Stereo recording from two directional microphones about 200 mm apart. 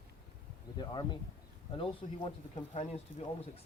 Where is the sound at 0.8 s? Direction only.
20° left (ahead or behind).